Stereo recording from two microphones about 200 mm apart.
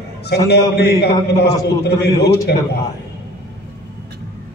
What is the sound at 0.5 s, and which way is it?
A man's voice, 55° left (ahead or behind).